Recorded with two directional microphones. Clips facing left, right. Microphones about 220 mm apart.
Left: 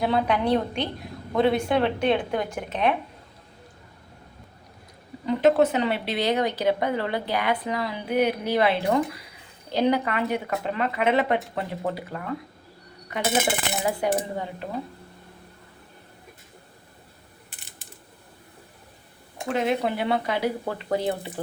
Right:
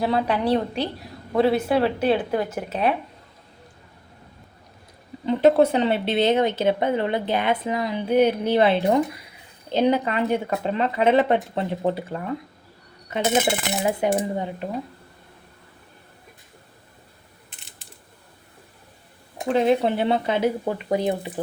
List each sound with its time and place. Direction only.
0.0 s a woman's voice: centre (ahead or behind)
5.2 s speech: 30° right (ahead or behind)
13.8 s speech: 20° right (ahead or behind)
19.5 s speech: 30° right (ahead or behind)